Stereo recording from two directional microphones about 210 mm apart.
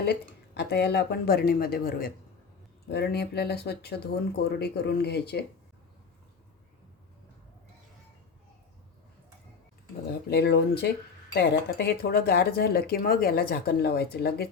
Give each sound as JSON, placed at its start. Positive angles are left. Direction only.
{"t": 0.0, "sound": "speech", "side_deg": 50}
{"t": 10.2, "sound": "speech", "side_deg": 50}